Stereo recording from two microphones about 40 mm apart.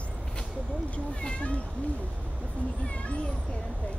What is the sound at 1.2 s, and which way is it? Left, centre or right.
Speech, left.